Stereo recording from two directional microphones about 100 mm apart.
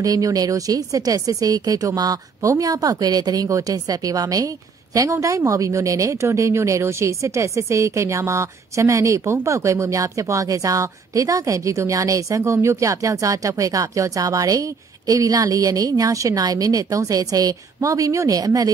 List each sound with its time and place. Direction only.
0.0 s speech: 35° right (ahead or behind)